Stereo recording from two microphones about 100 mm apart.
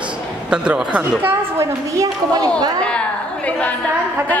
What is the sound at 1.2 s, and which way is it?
Speech, 25° right (ahead or behind).